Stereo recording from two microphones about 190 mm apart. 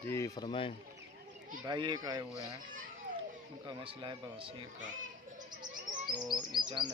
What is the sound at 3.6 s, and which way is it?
Speech, 25° right (ahead or behind).